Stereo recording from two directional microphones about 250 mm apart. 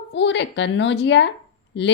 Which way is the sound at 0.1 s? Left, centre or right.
Left.